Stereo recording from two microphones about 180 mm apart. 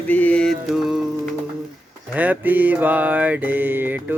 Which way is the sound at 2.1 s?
10° right (ahead or behind).